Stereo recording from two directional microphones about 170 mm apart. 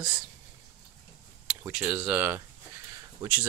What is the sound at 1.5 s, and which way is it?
Speech, 10° right (ahead or behind).